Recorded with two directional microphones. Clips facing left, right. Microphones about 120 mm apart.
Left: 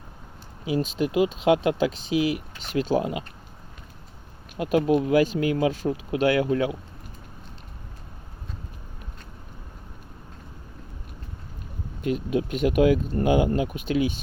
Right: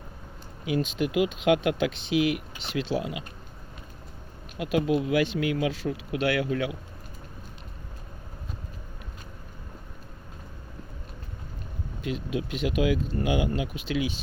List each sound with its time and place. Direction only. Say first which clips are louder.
0.6 s speech: left 2 dB; 35° left (ahead or behind)
4.5 s speech: left 4 dB; 45° left (ahead or behind)
12.0 s speech: left 6 dB; 45° left (ahead or behind)